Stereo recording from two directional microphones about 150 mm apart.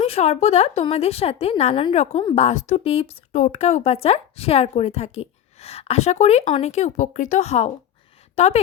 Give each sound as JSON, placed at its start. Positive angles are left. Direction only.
{"t": 0.0, "sound": "a woman's voice", "side_deg": 40}